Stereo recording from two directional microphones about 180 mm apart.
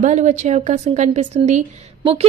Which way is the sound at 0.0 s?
40° right (ahead or behind).